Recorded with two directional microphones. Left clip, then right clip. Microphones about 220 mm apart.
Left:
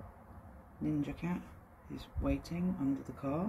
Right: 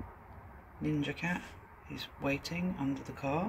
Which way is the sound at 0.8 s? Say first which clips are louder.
Right 2 dB; 5° right (ahead or behind).